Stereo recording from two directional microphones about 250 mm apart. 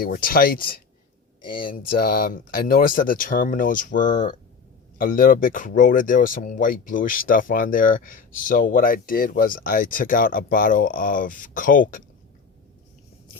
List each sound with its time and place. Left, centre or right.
0.0 s speech: left
2.0 s speech: left